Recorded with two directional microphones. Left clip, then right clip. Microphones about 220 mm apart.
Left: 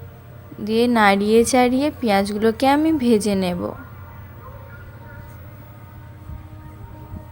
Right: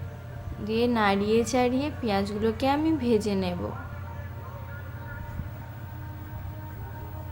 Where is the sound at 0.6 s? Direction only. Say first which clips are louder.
Left 8 dB; 40° left (ahead or behind).